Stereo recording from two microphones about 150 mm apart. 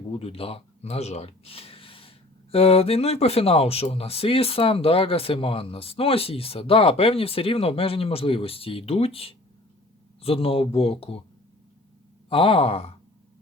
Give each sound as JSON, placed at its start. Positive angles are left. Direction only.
{"t": 0.1, "sound": "speech", "side_deg": 40}
{"t": 12.3, "sound": "speech", "side_deg": 35}